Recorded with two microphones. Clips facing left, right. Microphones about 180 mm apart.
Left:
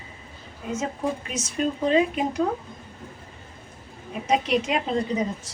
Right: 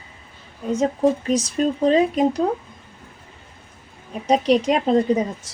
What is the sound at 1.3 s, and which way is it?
A woman's voice, 35° right (ahead or behind).